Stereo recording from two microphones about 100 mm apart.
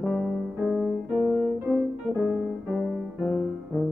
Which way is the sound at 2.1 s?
30° left (ahead or behind).